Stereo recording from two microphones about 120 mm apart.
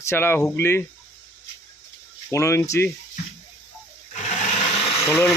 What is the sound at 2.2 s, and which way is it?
Speech, 25° left (ahead or behind).